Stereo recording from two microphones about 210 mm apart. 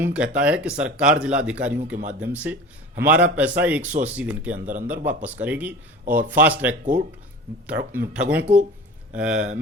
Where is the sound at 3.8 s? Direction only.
35° right (ahead or behind).